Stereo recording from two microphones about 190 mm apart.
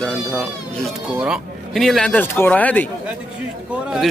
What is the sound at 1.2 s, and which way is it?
Speech, 5° right (ahead or behind).